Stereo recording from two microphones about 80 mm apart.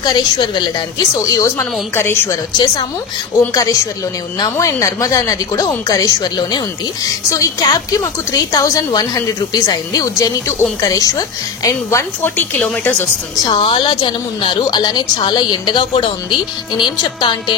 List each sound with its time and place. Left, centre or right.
0.0 s a woman's voice: left
2.5 s a woman's voice: left
3.5 s a woman's voice: left
7.6 s a woman's voice: left
12.2 s speech: left
13.5 s a woman's voice: left